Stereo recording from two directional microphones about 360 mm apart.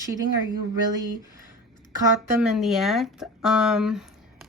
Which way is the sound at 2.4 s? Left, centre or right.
Centre.